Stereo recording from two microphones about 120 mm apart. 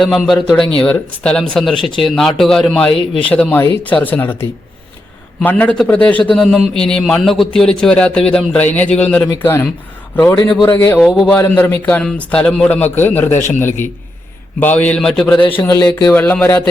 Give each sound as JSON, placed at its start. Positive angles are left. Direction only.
{"t": 0.0, "sound": "a man's voice", "side_deg": 5}
{"t": 10.7, "sound": "speech", "side_deg": 20}
{"t": 11.0, "sound": "speech", "side_deg": -5}
{"t": 11.3, "sound": "a man's voice", "side_deg": 15}
{"t": 14.6, "sound": "a man's voice", "side_deg": 15}